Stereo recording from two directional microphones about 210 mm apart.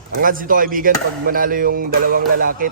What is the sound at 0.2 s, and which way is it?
A man's voice, 40° right (ahead or behind).